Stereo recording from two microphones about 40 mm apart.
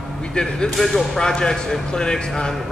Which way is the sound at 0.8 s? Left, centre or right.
Centre.